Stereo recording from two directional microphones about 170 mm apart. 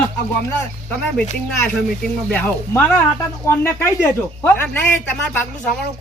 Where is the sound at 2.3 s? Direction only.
10° left (ahead or behind).